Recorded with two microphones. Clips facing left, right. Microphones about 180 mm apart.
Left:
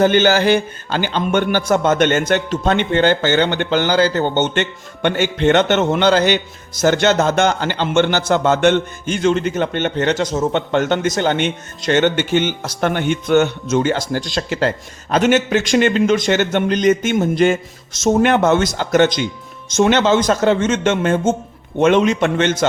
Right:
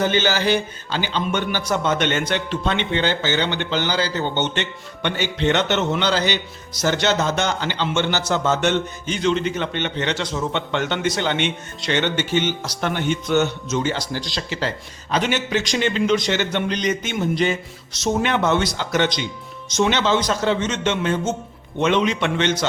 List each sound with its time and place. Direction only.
0.0 s a man's voice: 55° left (ahead or behind)